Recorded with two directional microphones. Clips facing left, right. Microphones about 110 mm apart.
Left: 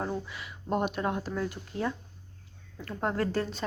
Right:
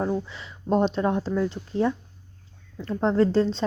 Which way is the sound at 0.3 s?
10° left (ahead or behind).